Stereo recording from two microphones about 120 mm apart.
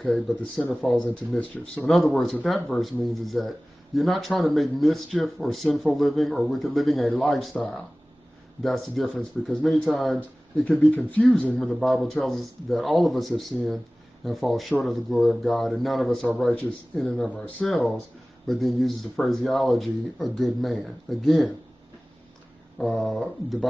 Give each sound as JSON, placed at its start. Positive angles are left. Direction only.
{"t": 0.0, "sound": "speech", "side_deg": 5}
{"t": 1.9, "sound": "speech", "side_deg": 0}
{"t": 8.6, "sound": "speech", "side_deg": 0}
{"t": 22.8, "sound": "speech", "side_deg": 0}